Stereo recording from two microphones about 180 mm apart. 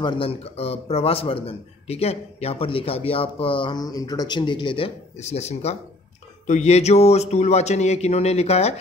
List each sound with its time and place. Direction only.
0.0 s speech: 30° left (ahead or behind)